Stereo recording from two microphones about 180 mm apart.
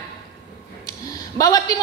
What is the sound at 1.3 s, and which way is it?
Speech, 20° left (ahead or behind).